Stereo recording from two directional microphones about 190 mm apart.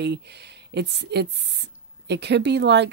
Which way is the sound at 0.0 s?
60° right (ahead or behind).